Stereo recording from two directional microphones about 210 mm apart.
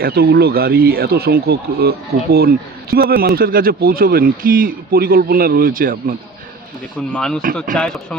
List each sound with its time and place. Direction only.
0.0 s speech: 50° right (ahead or behind)
7.1 s speech: 5° left (ahead or behind)